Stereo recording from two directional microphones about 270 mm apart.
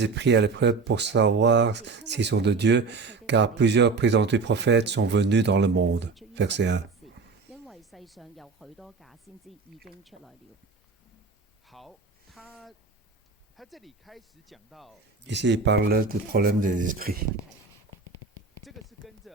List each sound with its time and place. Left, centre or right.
0.0 s speech: right
7.5 s speech: centre
11.7 s speech: centre
15.3 s speech: right
18.6 s a sound: centre